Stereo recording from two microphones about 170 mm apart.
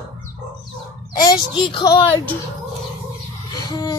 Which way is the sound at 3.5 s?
20° left (ahead or behind).